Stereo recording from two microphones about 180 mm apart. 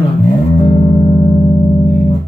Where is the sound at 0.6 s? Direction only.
30° left (ahead or behind).